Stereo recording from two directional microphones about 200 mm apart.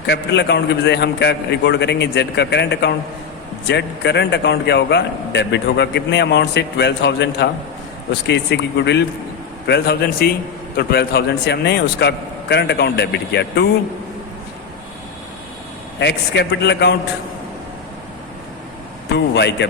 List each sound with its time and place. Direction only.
0.0 s a man's voice: 60° left (ahead or behind)
16.0 s a man's voice: 60° left (ahead or behind)
19.1 s a man's voice: 55° left (ahead or behind)